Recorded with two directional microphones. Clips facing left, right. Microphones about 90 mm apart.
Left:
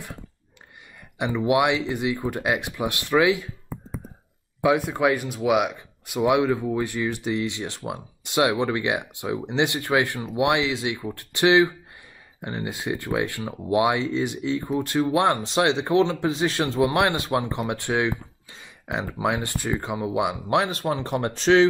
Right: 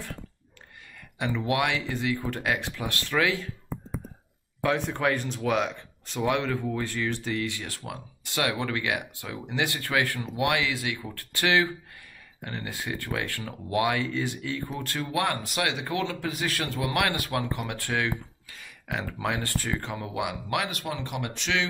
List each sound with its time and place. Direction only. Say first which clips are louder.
1.1 s speech: left 6 dB; 20° left (ahead or behind)
4.6 s speech: left 6 dB; 10° left (ahead or behind); by 21.6 s 35° left (ahead or behind)